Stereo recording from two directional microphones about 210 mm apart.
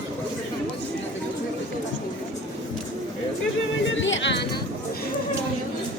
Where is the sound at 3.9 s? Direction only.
60° left (ahead or behind).